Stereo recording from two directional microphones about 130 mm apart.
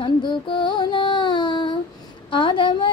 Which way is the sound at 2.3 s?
40° left (ahead or behind).